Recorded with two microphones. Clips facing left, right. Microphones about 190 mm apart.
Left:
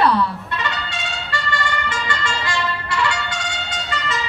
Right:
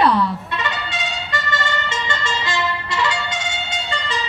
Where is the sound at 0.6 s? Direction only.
20° right (ahead or behind).